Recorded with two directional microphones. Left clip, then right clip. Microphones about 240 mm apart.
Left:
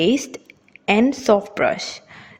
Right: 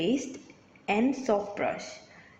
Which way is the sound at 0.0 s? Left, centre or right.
Left.